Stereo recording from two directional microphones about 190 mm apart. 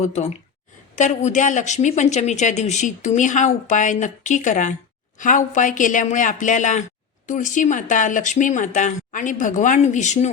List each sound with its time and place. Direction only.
0.0 s a woman's voice: 35° left (ahead or behind)